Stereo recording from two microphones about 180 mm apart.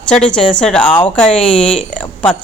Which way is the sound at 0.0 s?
5° left (ahead or behind).